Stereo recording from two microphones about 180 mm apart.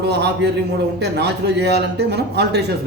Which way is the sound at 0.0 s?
70° right (ahead or behind).